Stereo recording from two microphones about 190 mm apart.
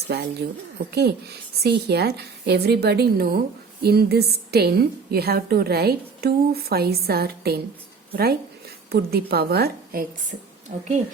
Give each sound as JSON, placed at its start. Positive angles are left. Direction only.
{"t": 0.1, "sound": "a woman's voice", "side_deg": -60}